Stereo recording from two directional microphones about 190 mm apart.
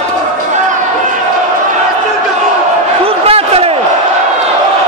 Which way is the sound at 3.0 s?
30° right (ahead or behind).